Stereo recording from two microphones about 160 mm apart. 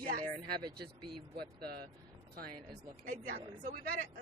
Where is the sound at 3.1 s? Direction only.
55° right (ahead or behind).